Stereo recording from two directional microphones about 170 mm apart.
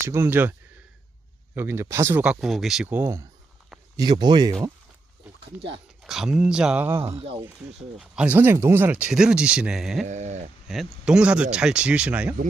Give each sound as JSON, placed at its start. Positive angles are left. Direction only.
{"t": 0.1, "sound": "speech", "side_deg": -15}
{"t": 1.5, "sound": "speech", "side_deg": -15}
{"t": 5.5, "sound": "speech", "side_deg": -90}
{"t": 6.0, "sound": "speech", "side_deg": 0}
{"t": 7.2, "sound": "speech", "side_deg": -35}
{"t": 7.9, "sound": "speech", "side_deg": -5}
{"t": 10.1, "sound": "speech", "side_deg": -45}
{"t": 10.7, "sound": "speech", "side_deg": 0}